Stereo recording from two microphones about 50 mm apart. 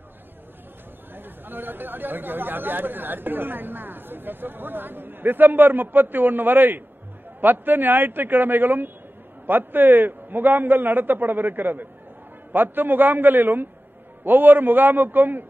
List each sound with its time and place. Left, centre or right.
1.1 s a man's voice: right